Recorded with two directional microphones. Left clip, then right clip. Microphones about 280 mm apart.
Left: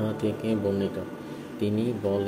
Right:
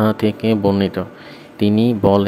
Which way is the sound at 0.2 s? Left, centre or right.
Right.